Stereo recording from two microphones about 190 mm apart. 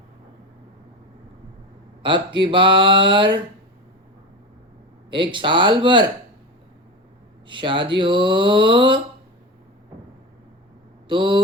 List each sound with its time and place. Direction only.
2.0 s speech: 25° right (ahead or behind)
5.1 s speech: 25° right (ahead or behind)
7.4 s speech: 25° right (ahead or behind)
11.1 s speech: 25° right (ahead or behind)